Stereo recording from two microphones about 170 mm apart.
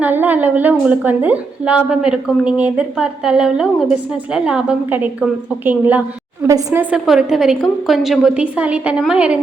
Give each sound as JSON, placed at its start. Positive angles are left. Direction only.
{"t": 0.0, "sound": "a woman's voice", "side_deg": -10}
{"t": 6.9, "sound": "a woman's voice", "side_deg": -5}